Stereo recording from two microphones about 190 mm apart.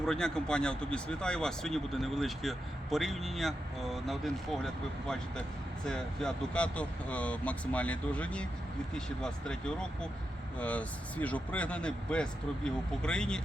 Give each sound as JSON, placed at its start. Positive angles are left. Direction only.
{"t": 0.0, "sound": "speech", "side_deg": 5}